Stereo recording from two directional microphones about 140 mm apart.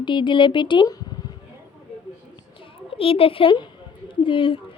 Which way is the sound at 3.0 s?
40° left (ahead or behind).